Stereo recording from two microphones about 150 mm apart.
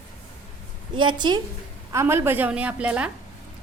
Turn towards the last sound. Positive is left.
turn(degrees=-10)  # may be behind; listen again after turning